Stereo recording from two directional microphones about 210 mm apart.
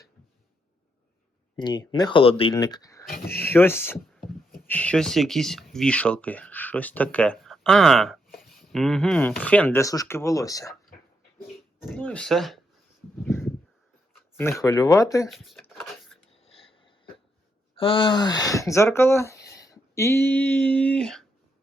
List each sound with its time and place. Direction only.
1.5 s speech: 20° left (ahead or behind)
11.9 s speech: 5° left (ahead or behind)
14.3 s speech: 15° left (ahead or behind)
15.3 s speech: centre (ahead or behind)
15.7 s a sound: centre (ahead or behind)
17.7 s speech: 25° left (ahead or behind); by 21.2 s centre (ahead or behind)